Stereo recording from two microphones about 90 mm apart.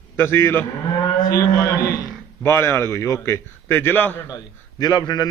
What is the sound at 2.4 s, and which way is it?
A man's voice, 25° left (ahead or behind).